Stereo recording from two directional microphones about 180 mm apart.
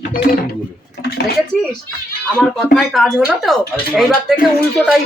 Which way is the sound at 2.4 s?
Centre (ahead or behind).